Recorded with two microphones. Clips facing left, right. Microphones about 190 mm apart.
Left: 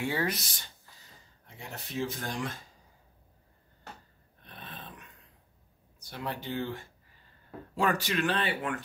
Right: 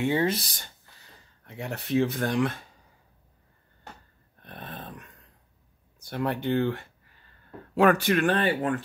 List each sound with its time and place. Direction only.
0.0 s speech: 25° right (ahead or behind)
1.4 s speech: 65° right (ahead or behind)
4.4 s dog: 50° right (ahead or behind)
5.9 s speech: 55° right (ahead or behind)